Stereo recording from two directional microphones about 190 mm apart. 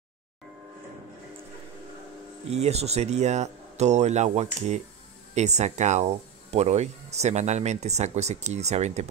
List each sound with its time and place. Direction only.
2.5 s speech: 35° right (ahead or behind)